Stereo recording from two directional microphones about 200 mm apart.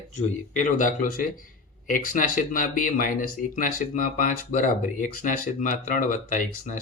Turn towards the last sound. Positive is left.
turn(degrees=40)  # may be behind; listen again after turning